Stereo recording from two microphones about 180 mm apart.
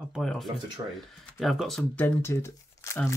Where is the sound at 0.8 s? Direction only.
20° right (ahead or behind).